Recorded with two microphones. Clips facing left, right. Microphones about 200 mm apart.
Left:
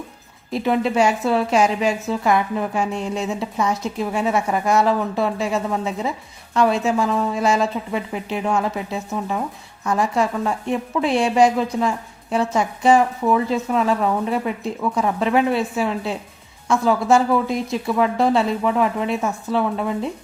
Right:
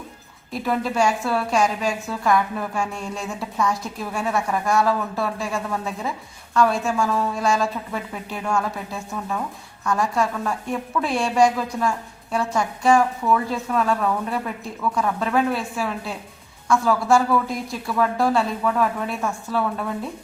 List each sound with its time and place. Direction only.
0.5 s a woman's voice: 25° left (ahead or behind)